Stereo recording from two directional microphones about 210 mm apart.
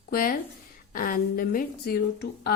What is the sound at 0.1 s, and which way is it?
A woman's voice, 45° left (ahead or behind).